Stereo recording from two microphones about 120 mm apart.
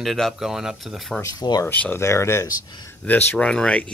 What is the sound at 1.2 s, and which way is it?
Speech, 35° left (ahead or behind).